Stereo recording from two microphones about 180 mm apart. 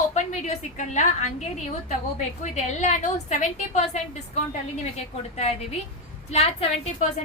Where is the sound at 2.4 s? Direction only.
40° left (ahead or behind).